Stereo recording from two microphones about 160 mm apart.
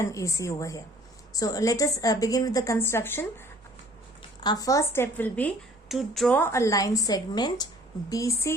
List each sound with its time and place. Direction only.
0.0 s a woman's voice: 20° left (ahead or behind)
4.4 s a woman's voice: 25° left (ahead or behind)
5.9 s a woman's voice: centre (ahead or behind)
6.3 s a woman's voice: 15° left (ahead or behind)